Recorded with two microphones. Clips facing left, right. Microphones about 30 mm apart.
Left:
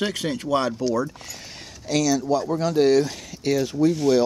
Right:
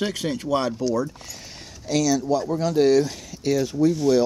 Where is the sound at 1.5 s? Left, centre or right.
Left.